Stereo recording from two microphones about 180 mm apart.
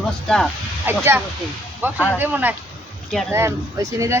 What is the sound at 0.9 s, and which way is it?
Speech, 10° right (ahead or behind).